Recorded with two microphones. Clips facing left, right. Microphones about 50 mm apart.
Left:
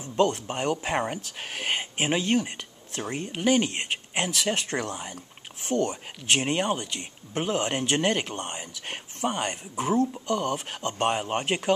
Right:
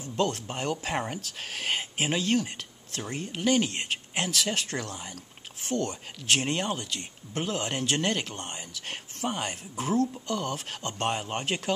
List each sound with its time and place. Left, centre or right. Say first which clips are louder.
0.2 s speech: left 5 dB; centre